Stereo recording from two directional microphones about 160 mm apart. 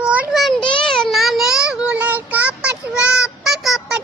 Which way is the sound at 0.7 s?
30° left (ahead or behind).